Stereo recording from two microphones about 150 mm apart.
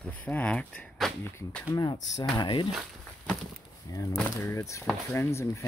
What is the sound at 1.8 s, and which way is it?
Speech, 30° left (ahead or behind).